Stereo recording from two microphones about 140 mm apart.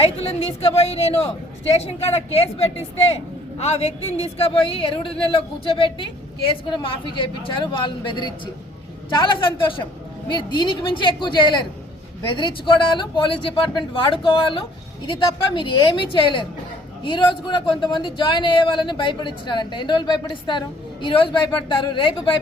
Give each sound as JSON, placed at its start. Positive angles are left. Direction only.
{"t": 0.0, "sound": "a woman's voice", "side_deg": 45}